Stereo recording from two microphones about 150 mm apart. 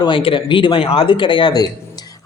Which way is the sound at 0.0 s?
35° left (ahead or behind).